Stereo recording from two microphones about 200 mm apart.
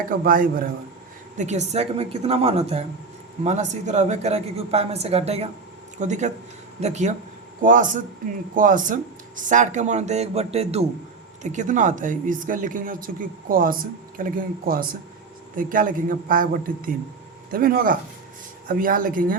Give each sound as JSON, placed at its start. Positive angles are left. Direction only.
{"t": 1.4, "sound": "speech", "side_deg": -35}